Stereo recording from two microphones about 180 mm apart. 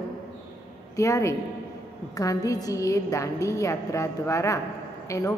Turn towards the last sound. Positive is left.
turn(degrees=15)  # may be behind; listen again after turning